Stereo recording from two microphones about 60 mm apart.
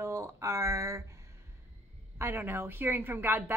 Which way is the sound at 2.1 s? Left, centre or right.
Right.